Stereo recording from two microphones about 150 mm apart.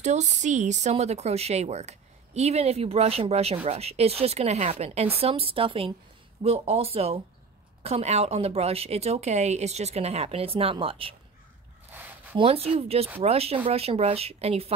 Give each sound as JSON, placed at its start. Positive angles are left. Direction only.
{"t": 0.0, "sound": "speech", "side_deg": -50}
{"t": 11.9, "sound": "a sound", "side_deg": -10}
{"t": 12.4, "sound": "speech", "side_deg": -40}